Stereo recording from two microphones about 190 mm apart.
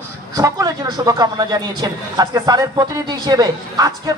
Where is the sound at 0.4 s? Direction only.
20° right (ahead or behind).